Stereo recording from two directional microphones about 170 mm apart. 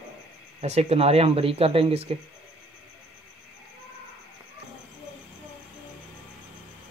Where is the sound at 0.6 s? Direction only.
40° right (ahead or behind).